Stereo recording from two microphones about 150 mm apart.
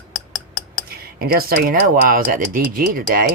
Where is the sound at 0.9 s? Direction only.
90° right.